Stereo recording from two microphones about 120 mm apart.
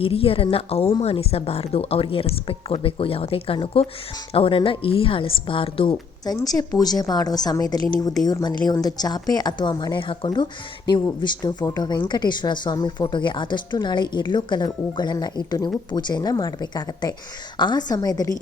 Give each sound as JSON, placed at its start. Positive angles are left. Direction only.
{"t": 0.0, "sound": "speech", "side_deg": 50}
{"t": 6.4, "sound": "speech", "side_deg": 30}